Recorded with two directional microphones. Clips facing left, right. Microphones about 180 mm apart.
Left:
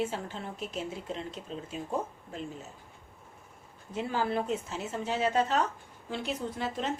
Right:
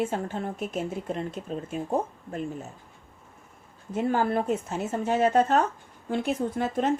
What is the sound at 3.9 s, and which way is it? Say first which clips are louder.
A woman's voice: right 6 dB; 50° right (ahead or behind).